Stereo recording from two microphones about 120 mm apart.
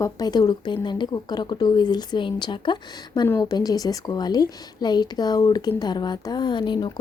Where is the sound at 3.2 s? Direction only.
25° left (ahead or behind).